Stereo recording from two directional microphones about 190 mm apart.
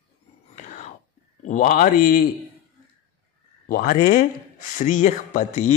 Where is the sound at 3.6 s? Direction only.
45° left (ahead or behind).